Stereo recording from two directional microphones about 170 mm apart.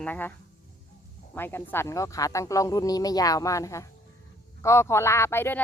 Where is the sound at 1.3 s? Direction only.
10° left (ahead or behind).